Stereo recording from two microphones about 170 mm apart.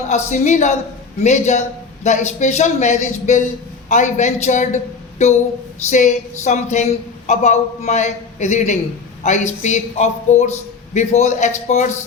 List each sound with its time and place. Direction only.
0.1 s a man's voice: 45° left (ahead or behind)